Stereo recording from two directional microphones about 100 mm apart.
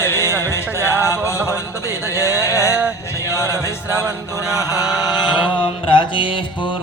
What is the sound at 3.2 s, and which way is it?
Music, 30° left (ahead or behind).